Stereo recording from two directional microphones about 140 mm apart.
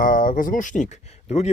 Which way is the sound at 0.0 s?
75° left (ahead or behind).